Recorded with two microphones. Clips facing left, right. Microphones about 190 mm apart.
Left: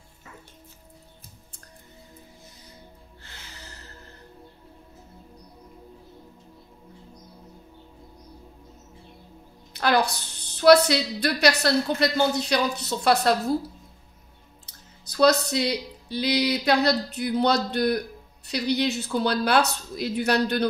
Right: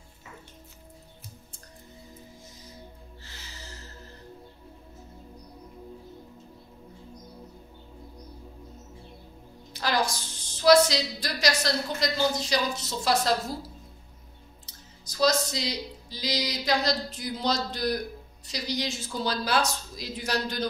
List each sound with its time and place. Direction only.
9.7 s a woman's voice: 60° left (ahead or behind)
14.7 s a woman's voice: 65° left (ahead or behind)